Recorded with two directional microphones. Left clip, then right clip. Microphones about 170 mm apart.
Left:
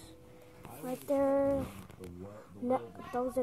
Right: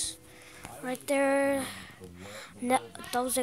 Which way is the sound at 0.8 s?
30° right (ahead or behind).